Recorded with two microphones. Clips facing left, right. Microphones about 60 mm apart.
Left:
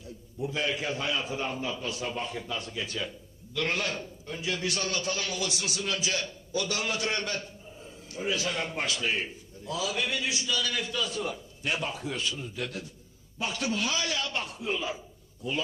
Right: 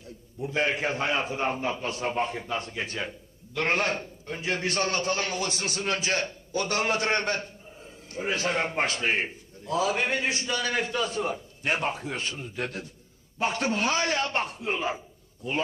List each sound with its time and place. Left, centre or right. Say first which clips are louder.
0.0 s a man's voice: even; right